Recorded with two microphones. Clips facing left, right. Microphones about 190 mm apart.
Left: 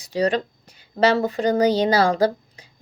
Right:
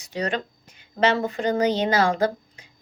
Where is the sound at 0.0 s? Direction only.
35° left (ahead or behind).